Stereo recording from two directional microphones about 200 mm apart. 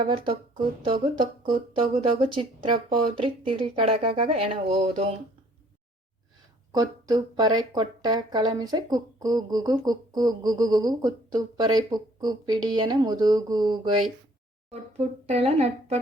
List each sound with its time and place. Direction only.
0.0 s speech: 25° right (ahead or behind)
6.7 s speech: 20° right (ahead or behind)
15.3 s a woman's voice: 30° right (ahead or behind)